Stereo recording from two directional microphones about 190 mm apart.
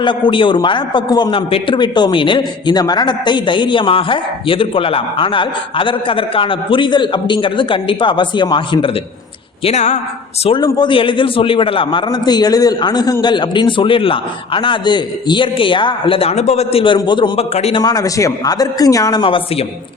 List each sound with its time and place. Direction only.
0.0 s a man's voice: 25° left (ahead or behind)
9.6 s a man's voice: 35° left (ahead or behind)
17.8 s a man's voice: 20° left (ahead or behind)